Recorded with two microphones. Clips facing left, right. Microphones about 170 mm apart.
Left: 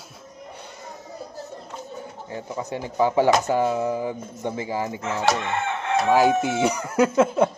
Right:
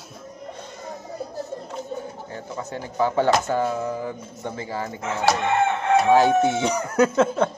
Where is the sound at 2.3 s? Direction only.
15° left (ahead or behind).